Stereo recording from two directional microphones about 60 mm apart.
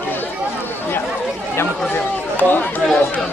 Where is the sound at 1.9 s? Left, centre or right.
Left.